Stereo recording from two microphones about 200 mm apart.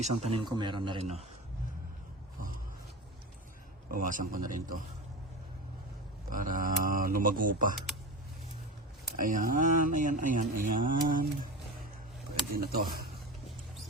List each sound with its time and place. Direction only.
0.0 s speech: 25° right (ahead or behind)
3.9 s speech: 40° right (ahead or behind)
6.3 s speech: 40° right (ahead or behind)
9.1 s speech: 45° right (ahead or behind)
12.5 s speech: 50° right (ahead or behind)